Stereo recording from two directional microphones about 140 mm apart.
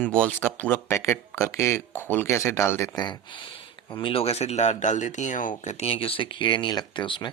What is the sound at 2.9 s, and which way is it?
Speech, 30° left (ahead or behind).